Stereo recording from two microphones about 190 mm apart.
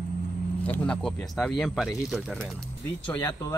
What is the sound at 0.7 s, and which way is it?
Speech, 5° left (ahead or behind).